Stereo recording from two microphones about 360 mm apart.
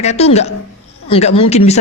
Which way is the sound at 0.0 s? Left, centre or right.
Centre.